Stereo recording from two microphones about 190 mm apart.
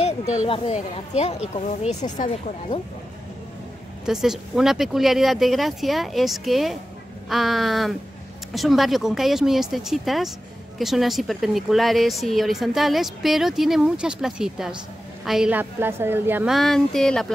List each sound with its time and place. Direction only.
0.5 s speech: 35° left (ahead or behind)
4.0 s a woman's voice: centre (ahead or behind)
16.5 s a woman's voice: centre (ahead or behind)